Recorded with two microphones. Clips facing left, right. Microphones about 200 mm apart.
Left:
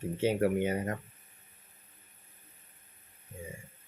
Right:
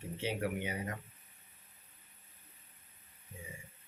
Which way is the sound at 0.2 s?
45° left (ahead or behind).